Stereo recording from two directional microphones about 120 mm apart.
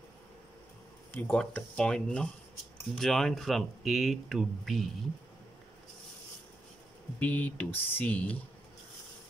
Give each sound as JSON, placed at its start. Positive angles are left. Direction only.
{"t": 1.1, "sound": "speech", "side_deg": 15}
{"t": 7.2, "sound": "speech", "side_deg": 15}